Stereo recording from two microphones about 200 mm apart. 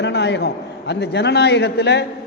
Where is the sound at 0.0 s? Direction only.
60° left (ahead or behind).